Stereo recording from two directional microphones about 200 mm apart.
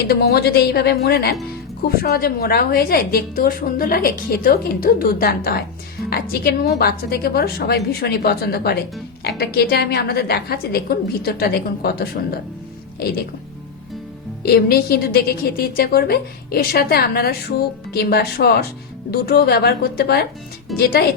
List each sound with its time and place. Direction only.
0.1 s a woman's voice: 50° left (ahead or behind)
14.4 s a woman's voice: 50° left (ahead or behind)